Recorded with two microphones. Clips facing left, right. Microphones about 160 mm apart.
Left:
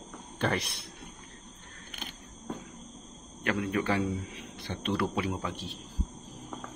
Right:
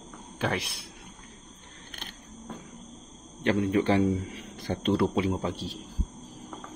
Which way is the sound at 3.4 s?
30° right (ahead or behind).